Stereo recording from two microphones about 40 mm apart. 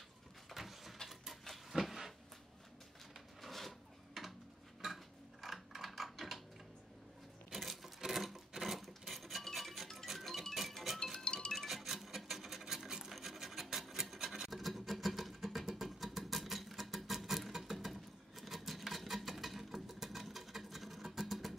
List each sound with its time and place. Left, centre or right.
0.6 s a sound: centre
1.0 s printer: centre
3.4 s a sound: centre
4.8 s mechanisms: centre
7.5 s coin: centre
8.5 s filing: centre
10.0 s music: centre
11.2 s music: left
11.6 s music: centre
12.4 s filing: centre
14.3 s music: centre
18.4 s a sound: centre